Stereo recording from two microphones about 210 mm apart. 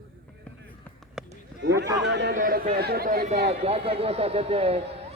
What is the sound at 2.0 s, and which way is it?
Speech, 55° right (ahead or behind).